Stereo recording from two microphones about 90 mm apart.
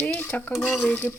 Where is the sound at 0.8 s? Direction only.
20° left (ahead or behind).